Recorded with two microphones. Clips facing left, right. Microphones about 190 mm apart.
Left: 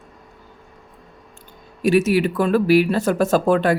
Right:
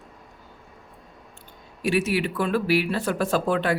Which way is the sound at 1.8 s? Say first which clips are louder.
Left 7 dB; 40° left (ahead or behind).